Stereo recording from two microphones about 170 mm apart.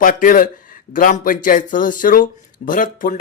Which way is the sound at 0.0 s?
55° left (ahead or behind).